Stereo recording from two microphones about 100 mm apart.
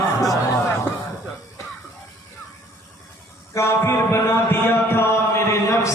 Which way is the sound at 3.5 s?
25° left (ahead or behind).